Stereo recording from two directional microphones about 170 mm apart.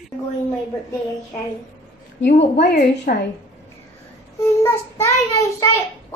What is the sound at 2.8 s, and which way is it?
Speech, 65° left (ahead or behind).